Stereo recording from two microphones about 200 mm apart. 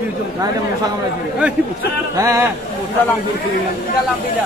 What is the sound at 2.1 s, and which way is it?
Speech, 15° right (ahead or behind).